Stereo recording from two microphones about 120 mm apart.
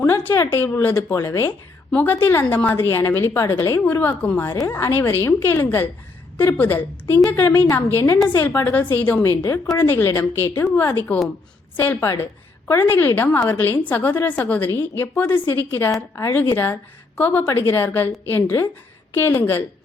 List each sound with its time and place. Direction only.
0.0 s a woman's voice: 15° left (ahead or behind)
9.4 s a woman's voice: 25° left (ahead or behind)